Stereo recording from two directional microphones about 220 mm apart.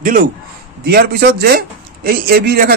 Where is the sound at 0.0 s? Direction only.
40° right (ahead or behind).